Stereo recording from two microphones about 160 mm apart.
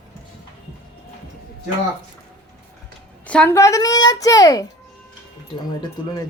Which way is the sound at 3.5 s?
20° left (ahead or behind).